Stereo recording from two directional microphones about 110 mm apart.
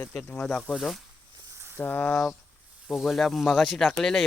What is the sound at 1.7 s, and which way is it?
Speech, 15° left (ahead or behind).